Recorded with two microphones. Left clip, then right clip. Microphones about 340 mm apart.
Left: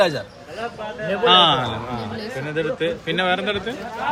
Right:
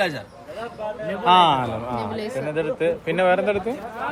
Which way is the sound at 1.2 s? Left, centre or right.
Centre.